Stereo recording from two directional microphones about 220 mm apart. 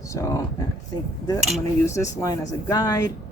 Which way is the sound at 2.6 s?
15° left (ahead or behind).